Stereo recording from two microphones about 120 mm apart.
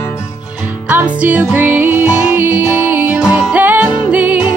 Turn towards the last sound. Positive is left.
turn(degrees=-10)  # may be behind; listen again after turning